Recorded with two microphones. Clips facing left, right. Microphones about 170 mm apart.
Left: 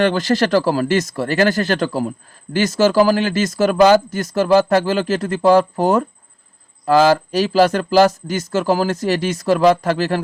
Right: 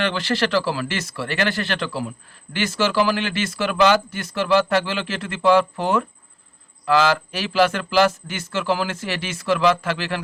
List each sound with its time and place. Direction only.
0.0 s speech: 40° left (ahead or behind)